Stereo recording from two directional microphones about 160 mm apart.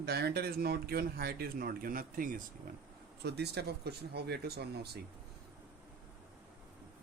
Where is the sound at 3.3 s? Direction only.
90° right.